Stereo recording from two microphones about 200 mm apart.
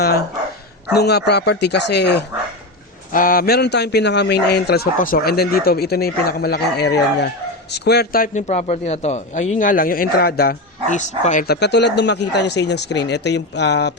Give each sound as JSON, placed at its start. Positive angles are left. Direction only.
{"t": 0.9, "sound": "speech", "side_deg": 55}
{"t": 3.1, "sound": "a man's voice", "side_deg": 45}
{"t": 11.4, "sound": "speech", "side_deg": 55}